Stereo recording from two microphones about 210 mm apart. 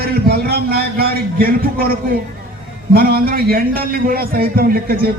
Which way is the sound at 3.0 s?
45° right (ahead or behind).